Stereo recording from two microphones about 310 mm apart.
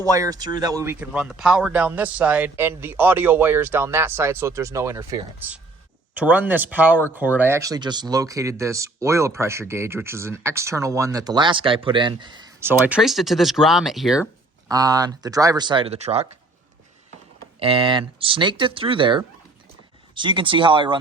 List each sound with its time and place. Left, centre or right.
0.0 s speech: centre
14.7 s speech: centre
17.6 s speech: centre